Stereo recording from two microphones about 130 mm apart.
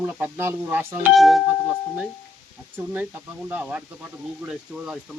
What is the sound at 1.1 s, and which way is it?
Speech, centre (ahead or behind).